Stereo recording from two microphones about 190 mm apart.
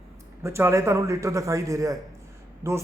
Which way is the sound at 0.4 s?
15° right (ahead or behind).